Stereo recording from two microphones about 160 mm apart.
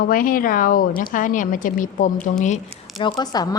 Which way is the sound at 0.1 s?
60° left (ahead or behind).